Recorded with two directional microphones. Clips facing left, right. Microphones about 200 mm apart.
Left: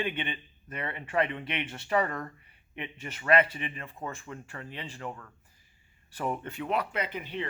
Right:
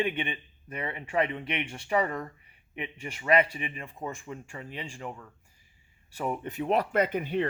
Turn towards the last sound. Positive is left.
turn(degrees=-50)  # may be behind; listen again after turning